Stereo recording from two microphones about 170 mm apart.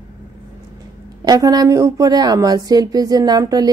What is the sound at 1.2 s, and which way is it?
Speech, 20° right (ahead or behind).